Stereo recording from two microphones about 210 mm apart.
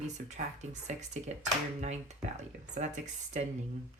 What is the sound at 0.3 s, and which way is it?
Speech, 35° right (ahead or behind).